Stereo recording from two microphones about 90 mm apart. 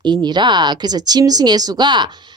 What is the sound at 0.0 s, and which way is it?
Speech, 55° right (ahead or behind).